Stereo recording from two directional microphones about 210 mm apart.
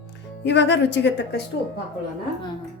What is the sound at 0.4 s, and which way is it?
Speech, 55° left (ahead or behind).